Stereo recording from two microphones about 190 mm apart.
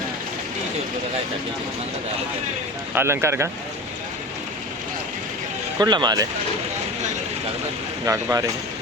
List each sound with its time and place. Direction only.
2.9 s speech: 15° right (ahead or behind)
5.8 s speech: 20° right (ahead or behind)
8.0 s speech: 15° right (ahead or behind)